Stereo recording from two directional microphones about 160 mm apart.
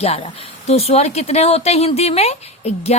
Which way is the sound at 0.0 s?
40° left (ahead or behind).